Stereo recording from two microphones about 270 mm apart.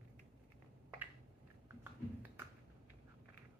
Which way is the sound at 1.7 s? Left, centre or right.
Centre.